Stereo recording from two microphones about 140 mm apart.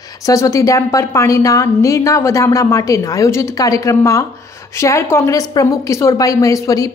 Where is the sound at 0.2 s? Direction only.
25° left (ahead or behind).